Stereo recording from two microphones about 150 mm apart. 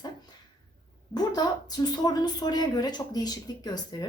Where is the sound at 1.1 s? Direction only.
25° left (ahead or behind).